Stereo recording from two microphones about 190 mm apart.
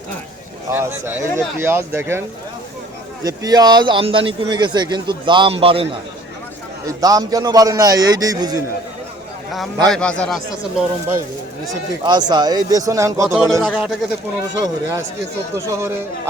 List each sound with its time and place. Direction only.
0.7 s speech: 10° right (ahead or behind)
3.2 s a man's voice: 20° right (ahead or behind)
9.9 s a man's voice: 5° left (ahead or behind)
12.0 s a man's voice: 25° right (ahead or behind)
13.2 s a man's voice: centre (ahead or behind)
14.6 s speech: 15° right (ahead or behind)